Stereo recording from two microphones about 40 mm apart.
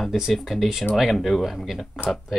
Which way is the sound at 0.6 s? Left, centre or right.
Centre.